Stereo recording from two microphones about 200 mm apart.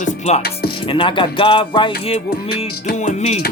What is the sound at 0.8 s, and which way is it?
Speech, 25° left (ahead or behind).